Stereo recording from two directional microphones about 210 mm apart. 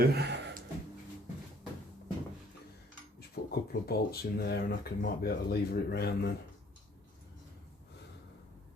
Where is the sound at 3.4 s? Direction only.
45° left (ahead or behind).